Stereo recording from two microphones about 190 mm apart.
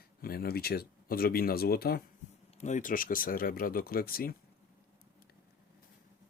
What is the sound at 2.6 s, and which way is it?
Speech, 40° left (ahead or behind).